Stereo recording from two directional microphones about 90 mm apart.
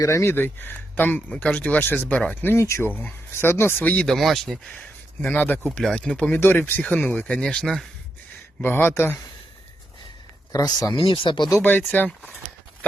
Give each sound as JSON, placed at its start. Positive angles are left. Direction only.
{"t": 0.0, "sound": "speech", "side_deg": 30}
{"t": 4.0, "sound": "speech", "side_deg": 0}
{"t": 4.7, "sound": "speech", "side_deg": 20}
{"t": 6.4, "sound": "speech", "side_deg": 25}
{"t": 8.6, "sound": "speech", "side_deg": 25}
{"t": 10.5, "sound": "speech", "side_deg": 45}
{"t": 10.9, "sound": "speech", "side_deg": 75}
{"t": 11.6, "sound": "speech", "side_deg": 20}